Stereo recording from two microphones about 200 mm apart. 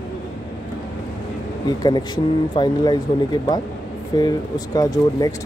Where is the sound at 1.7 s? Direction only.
20° left (ahead or behind).